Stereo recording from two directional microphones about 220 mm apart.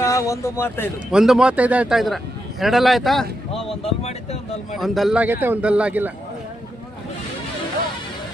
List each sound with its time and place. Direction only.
0.0 s speech: 15° left (ahead or behind)
1.1 s a man's voice: 5° right (ahead or behind)
3.5 s speech: 25° left (ahead or behind)
4.7 s a man's voice: centre (ahead or behind)